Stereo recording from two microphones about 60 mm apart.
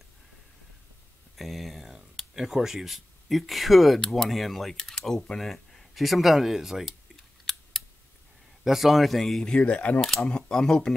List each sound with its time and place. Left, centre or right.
1.3 s a sound: centre
2.3 s speech: centre
7.5 s computer keyboard: centre
8.6 s speech: centre
9.6 s speech: left
9.9 s speech: centre